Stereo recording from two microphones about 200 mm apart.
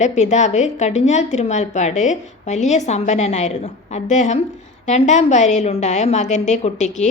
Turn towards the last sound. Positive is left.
turn(degrees=35)  # may be behind; listen again after turning